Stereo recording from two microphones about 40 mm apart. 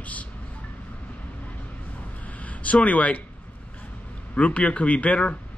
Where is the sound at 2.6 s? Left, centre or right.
Left.